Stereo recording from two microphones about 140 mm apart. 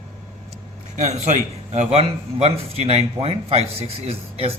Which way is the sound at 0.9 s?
55° right (ahead or behind).